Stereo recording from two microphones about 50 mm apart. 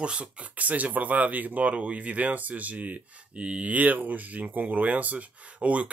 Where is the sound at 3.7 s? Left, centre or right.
Right.